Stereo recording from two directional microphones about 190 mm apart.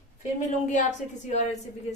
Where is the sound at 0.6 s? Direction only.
40° left (ahead or behind).